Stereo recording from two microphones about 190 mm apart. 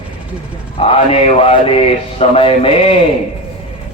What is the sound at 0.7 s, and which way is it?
Mantra, 30° left (ahead or behind).